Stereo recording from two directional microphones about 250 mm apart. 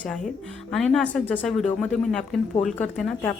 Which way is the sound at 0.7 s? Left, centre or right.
Centre.